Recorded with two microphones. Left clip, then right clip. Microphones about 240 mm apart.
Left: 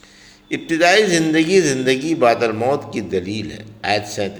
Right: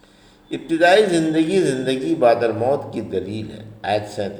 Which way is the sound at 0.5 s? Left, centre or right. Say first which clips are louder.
Even; left.